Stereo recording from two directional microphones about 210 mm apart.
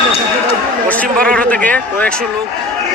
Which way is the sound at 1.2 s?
5° left (ahead or behind).